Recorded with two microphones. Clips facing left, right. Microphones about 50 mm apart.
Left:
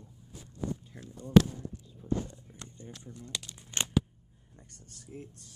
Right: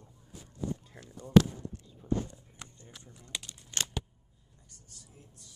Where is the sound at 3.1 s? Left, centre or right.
Centre.